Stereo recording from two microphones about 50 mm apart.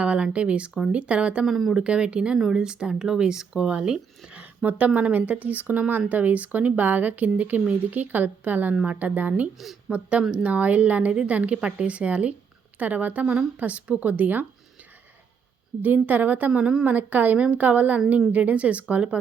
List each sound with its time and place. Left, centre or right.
0.0 s speech: right
1.5 s speech: centre
1.7 s speech: centre
4.9 s speech: right
9.6 s speech: centre
9.9 s speech: right
15.8 s speech: right